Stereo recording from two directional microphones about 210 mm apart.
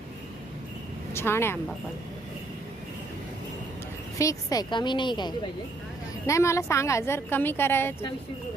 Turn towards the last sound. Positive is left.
turn(degrees=10)  # may be behind; listen again after turning